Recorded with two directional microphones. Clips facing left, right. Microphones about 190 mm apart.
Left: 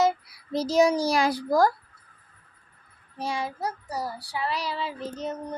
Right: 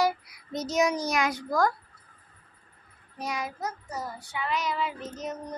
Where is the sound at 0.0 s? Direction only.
30° left (ahead or behind).